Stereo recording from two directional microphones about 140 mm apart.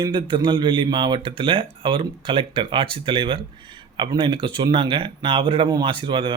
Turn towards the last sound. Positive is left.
turn(degrees=-35)  # may be behind; listen again after turning